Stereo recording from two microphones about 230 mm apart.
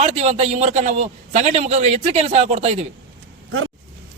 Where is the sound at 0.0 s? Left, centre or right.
Right.